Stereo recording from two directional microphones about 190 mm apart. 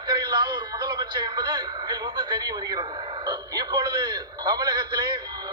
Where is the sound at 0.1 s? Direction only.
25° right (ahead or behind).